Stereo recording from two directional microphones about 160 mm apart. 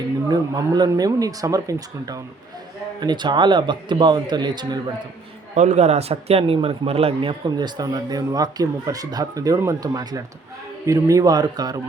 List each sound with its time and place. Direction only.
0.3 s a man's voice: 25° right (ahead or behind)
5.5 s a man's voice: 45° right (ahead or behind); by 11.8 s 25° right (ahead or behind)